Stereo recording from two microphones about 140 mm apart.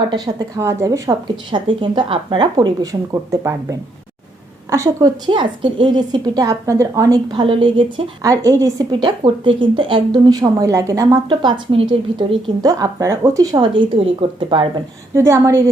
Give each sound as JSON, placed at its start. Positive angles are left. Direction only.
{"t": 0.1, "sound": "a woman's voice", "side_deg": -25}
{"t": 2.6, "sound": "a woman's voice", "side_deg": -25}
{"t": 8.2, "sound": "a woman's voice", "side_deg": -25}
{"t": 15.1, "sound": "a woman's voice", "side_deg": -20}